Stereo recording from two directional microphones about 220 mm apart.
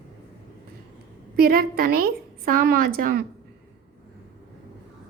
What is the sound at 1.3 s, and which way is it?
A woman's voice, 40° right (ahead or behind).